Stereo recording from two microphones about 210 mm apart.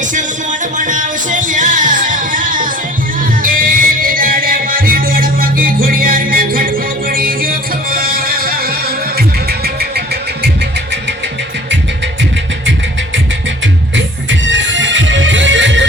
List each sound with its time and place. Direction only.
0.8 s music: 40° right (ahead or behind)
13.9 s music: 60° right (ahead or behind)